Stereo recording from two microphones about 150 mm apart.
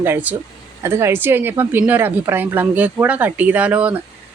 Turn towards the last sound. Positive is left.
turn(degrees=-10)  # may be behind; listen again after turning